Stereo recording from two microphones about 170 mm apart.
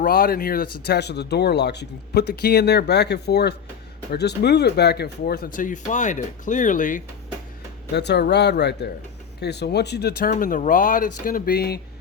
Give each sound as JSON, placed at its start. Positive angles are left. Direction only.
{"t": 0.0, "sound": "speech", "side_deg": 60}
{"t": 7.9, "sound": "speech", "side_deg": 80}
{"t": 10.2, "sound": "speech", "side_deg": 50}